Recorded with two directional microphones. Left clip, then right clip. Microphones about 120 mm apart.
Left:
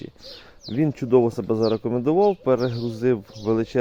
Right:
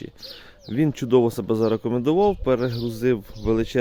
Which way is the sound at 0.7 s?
25° right (ahead or behind).